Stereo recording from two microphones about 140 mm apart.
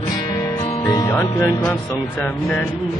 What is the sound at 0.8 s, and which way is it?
Music, 30° left (ahead or behind).